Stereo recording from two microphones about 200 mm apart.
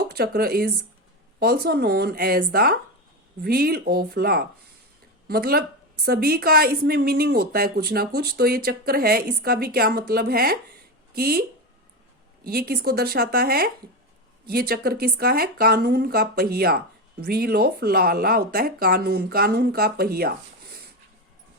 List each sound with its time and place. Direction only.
0.0 s speech: 50° right (ahead or behind)
12.5 s speech: 50° right (ahead or behind)